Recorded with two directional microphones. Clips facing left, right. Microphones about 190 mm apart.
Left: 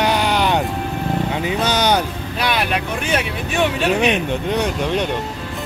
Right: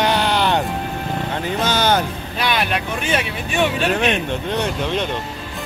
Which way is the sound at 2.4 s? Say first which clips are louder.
Even; centre (ahead or behind).